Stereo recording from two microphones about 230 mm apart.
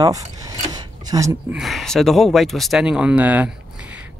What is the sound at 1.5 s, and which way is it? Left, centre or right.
Speech, centre.